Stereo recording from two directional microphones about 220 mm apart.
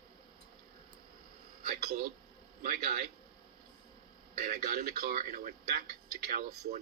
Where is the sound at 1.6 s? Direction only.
40° right (ahead or behind).